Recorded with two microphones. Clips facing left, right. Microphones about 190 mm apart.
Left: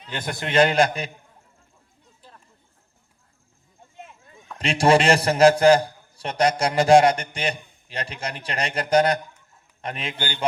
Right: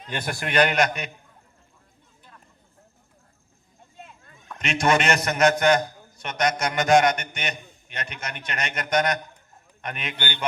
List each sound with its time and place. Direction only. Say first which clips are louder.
0.3 s a man's voice: left 3 dB; 25° left (ahead or behind)
4.5 s a man's voice: left 4 dB; 30° left (ahead or behind)